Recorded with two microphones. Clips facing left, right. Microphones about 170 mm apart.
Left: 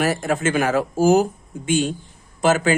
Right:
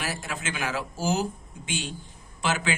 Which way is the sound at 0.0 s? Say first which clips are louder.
Left 13 dB; 50° left (ahead or behind).